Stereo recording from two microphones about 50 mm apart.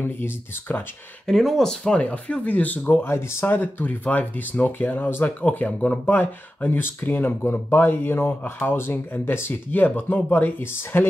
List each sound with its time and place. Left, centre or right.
0.0 s speech: left
1.3 s speech: centre
1.6 s speech: centre
2.0 s speech: left
3.0 s speech: left
6.0 s speech: left
9.7 s speech: left